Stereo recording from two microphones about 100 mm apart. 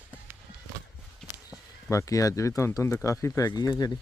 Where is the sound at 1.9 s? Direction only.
35° left (ahead or behind).